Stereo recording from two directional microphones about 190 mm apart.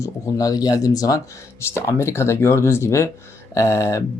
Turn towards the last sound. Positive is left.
turn(degrees=15)  # may be behind; listen again after turning